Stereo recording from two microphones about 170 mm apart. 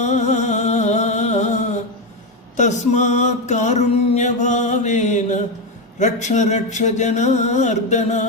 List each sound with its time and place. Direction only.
0.0 s music: 45° left (ahead or behind)